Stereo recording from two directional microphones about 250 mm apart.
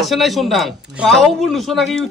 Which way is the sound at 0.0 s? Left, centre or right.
Centre.